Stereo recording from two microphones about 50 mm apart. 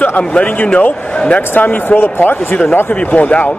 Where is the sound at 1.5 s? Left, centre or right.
Left.